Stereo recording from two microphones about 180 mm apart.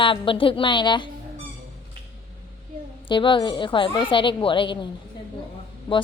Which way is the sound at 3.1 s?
25° left (ahead or behind).